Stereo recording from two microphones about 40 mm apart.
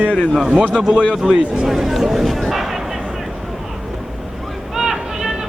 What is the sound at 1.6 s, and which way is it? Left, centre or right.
Speech, centre.